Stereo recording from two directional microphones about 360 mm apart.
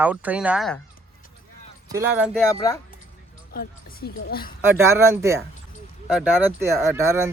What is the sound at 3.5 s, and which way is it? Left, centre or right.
A woman's voice, left.